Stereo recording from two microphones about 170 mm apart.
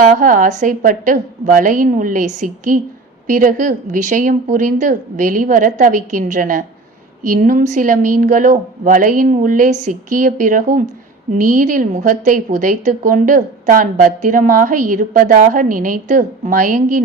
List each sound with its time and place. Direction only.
0.0 s a woman's voice: 50° right (ahead or behind)